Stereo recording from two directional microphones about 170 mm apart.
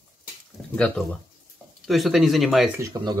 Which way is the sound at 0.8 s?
5° left (ahead or behind).